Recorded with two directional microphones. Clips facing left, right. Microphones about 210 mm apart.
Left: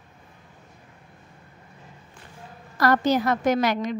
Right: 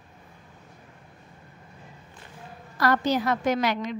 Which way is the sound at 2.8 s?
45° left (ahead or behind).